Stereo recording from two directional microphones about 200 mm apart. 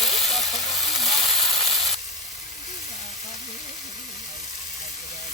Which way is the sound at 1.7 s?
Centre (ahead or behind).